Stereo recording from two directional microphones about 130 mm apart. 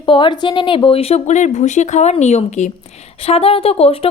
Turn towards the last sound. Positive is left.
turn(degrees=50)  # may be behind; listen again after turning